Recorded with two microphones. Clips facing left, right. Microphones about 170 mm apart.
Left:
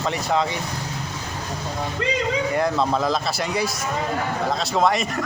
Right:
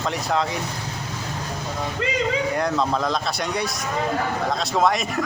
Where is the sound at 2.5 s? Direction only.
Centre (ahead or behind).